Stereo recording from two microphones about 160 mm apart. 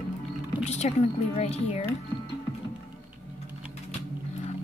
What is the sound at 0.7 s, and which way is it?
A woman's voice, 45° left (ahead or behind).